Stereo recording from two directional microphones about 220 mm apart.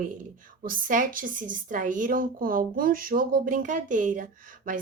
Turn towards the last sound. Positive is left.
turn(degrees=-35)  # may be behind; listen again after turning